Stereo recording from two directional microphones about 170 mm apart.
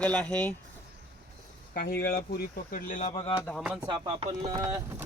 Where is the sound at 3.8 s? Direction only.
25° right (ahead or behind).